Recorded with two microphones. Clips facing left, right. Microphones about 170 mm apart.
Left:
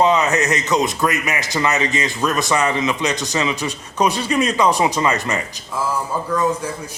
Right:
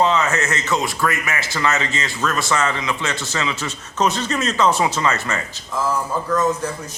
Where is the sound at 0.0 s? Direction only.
20° left (ahead or behind).